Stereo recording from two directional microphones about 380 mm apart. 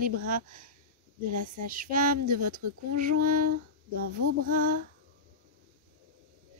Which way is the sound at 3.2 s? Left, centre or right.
Right.